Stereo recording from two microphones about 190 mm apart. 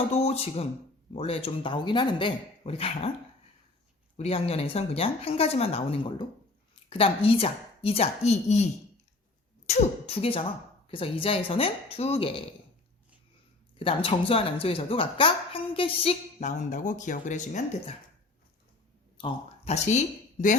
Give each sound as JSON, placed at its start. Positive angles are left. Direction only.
{"t": 0.1, "sound": "speech", "side_deg": 35}
{"t": 4.2, "sound": "speech", "side_deg": 30}
{"t": 9.6, "sound": "speech", "side_deg": 35}
{"t": 13.7, "sound": "speech", "side_deg": 30}
{"t": 19.1, "sound": "speech", "side_deg": 30}